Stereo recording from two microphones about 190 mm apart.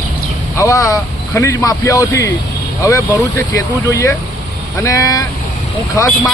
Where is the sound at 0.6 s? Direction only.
15° left (ahead or behind).